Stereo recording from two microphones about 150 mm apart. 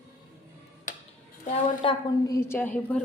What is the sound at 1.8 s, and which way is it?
A woman's voice, 25° left (ahead or behind).